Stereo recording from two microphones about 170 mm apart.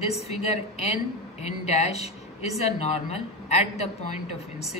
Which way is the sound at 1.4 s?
40° left (ahead or behind).